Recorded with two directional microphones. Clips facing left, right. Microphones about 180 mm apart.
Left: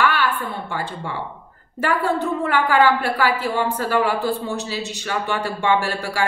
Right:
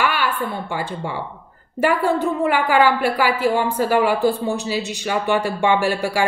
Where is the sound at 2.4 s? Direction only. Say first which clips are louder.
Even; 15° right (ahead or behind).